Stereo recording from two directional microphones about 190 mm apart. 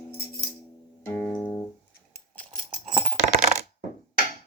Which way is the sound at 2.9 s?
25° right (ahead or behind).